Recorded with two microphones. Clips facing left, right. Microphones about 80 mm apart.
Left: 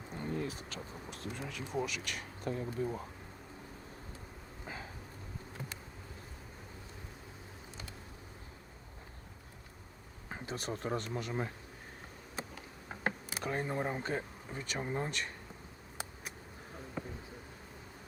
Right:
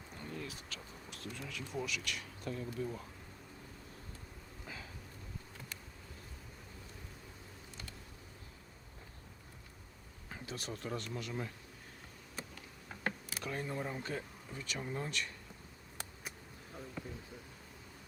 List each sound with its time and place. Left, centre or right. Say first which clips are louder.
0.1 s a sound: left 7 dB; left
2.0 s speech: left 3 dB; left
4.6 s a sound: left 4 dB; left
10.2 s speech: left 5 dB; left
12.4 s insect: left 4 dB; left
13.4 s speech: left 5 dB; left
17.0 s bee: left 5 dB; left